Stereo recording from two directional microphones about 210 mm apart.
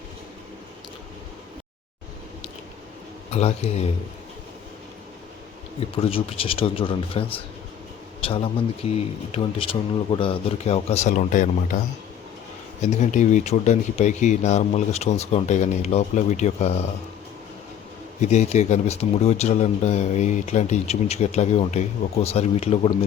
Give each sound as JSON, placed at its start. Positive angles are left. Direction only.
{"t": 3.2, "sound": "speech", "side_deg": 30}
{"t": 5.8, "sound": "speech", "side_deg": 25}
{"t": 12.8, "sound": "speech", "side_deg": 35}
{"t": 18.2, "sound": "speech", "side_deg": 35}